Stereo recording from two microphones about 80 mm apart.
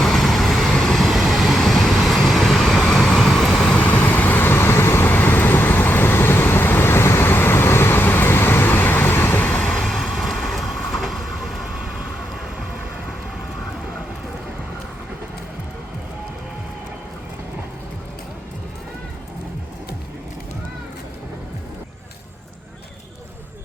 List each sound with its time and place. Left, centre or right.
0.0 s vehicle: centre
3.8 s vehicle: centre
9.8 s train: centre